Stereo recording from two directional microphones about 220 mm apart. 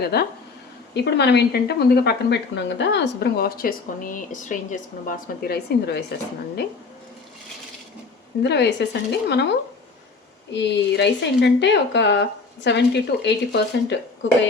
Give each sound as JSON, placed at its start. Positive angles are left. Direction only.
{"t": 0.0, "sound": "a woman's voice", "side_deg": 45}
{"t": 8.4, "sound": "a woman's voice", "side_deg": 50}
{"t": 10.5, "sound": "a woman's voice", "side_deg": 50}